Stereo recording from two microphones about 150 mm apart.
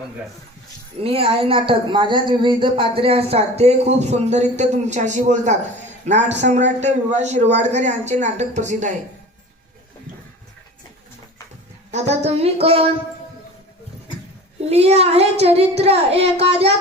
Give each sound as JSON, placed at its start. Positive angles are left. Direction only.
{"t": 1.0, "sound": "a woman's voice", "side_deg": -40}
{"t": 11.9, "sound": "a man's voice", "side_deg": -50}
{"t": 14.6, "sound": "a man's voice", "side_deg": -45}